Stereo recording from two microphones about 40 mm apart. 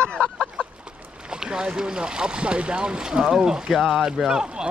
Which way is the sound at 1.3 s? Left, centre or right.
Centre.